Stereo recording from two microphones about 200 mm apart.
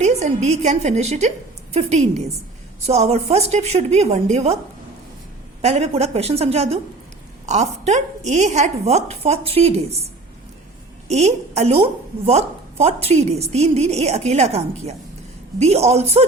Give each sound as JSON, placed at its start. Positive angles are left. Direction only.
{"t": 0.0, "sound": "a woman's voice", "side_deg": -35}
{"t": 5.6, "sound": "a woman's voice", "side_deg": -30}
{"t": 11.1, "sound": "a woman's voice", "side_deg": -35}